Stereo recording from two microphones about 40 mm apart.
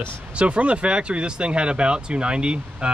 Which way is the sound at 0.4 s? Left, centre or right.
Right.